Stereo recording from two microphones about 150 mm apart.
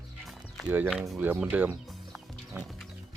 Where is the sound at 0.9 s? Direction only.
Centre (ahead or behind).